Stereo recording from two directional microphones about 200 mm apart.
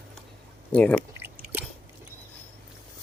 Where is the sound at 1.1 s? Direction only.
10° right (ahead or behind).